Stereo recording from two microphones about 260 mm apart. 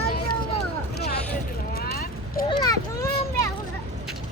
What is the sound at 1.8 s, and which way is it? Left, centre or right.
Vehicle, left.